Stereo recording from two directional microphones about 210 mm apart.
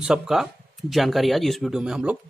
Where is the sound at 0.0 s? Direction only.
Centre (ahead or behind).